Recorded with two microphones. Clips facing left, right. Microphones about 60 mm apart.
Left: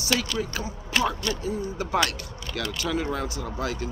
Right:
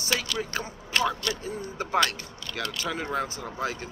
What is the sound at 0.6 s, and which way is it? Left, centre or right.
Speech, centre.